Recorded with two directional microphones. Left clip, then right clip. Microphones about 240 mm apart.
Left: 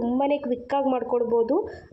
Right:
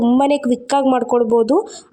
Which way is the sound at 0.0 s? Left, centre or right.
Right.